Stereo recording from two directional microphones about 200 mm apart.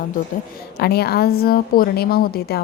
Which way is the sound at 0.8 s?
50° left (ahead or behind).